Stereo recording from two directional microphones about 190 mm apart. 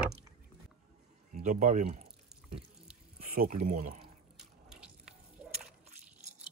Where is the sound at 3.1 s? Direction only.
50° right (ahead or behind).